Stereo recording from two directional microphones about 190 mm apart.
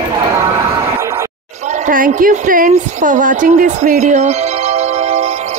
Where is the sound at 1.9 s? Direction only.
45° right (ahead or behind).